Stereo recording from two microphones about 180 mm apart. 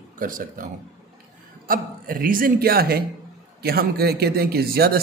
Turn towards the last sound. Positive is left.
turn(degrees=-60)  # may be behind; listen again after turning